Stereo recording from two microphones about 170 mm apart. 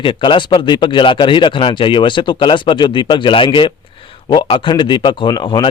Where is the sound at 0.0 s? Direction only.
30° left (ahead or behind).